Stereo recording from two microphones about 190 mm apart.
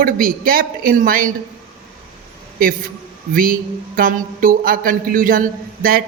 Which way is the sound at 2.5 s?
50° right (ahead or behind).